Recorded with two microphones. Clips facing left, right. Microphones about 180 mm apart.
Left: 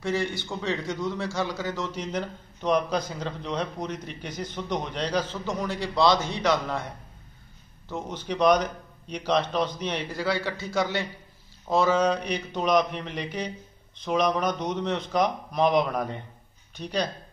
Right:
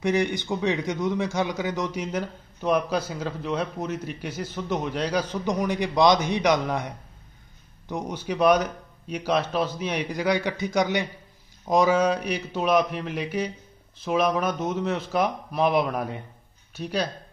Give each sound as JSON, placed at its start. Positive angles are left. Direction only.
{"t": 0.0, "sound": "a man's voice", "side_deg": -20}
{"t": 7.9, "sound": "a man's voice", "side_deg": -10}